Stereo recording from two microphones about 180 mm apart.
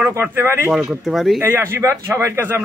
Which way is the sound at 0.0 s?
15° right (ahead or behind).